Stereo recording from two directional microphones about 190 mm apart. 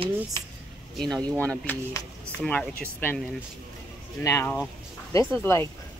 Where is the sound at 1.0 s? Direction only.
5° left (ahead or behind).